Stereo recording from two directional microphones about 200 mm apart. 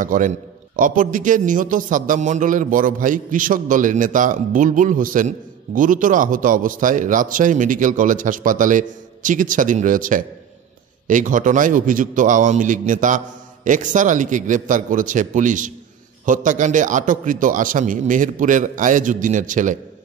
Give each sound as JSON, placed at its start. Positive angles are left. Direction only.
{"t": 0.0, "sound": "a man's voice", "side_deg": -40}